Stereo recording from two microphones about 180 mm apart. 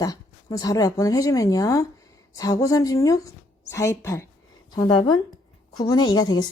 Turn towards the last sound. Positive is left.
turn(degrees=20)  # may be behind; listen again after turning